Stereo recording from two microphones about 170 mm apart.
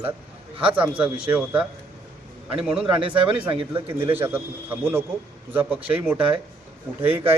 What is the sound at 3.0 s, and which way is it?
Speech, 30° right (ahead or behind).